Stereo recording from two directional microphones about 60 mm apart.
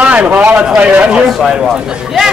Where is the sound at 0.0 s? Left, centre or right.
Right.